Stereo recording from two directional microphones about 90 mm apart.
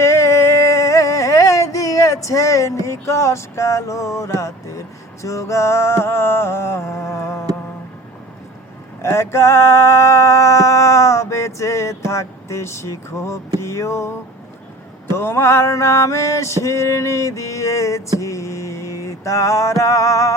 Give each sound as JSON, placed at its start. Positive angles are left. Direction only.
{"t": 0.0, "sound": "a sound", "side_deg": 30}
{"t": 2.8, "sound": "male singing", "side_deg": 30}
{"t": 9.0, "sound": "male singing", "side_deg": 30}
{"t": 13.6, "sound": "music", "side_deg": 35}
{"t": 15.1, "sound": "male singing", "side_deg": 30}
{"t": 18.2, "sound": "a sound", "side_deg": 35}